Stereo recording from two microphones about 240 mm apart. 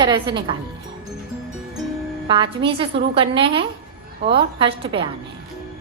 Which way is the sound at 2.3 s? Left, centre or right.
Right.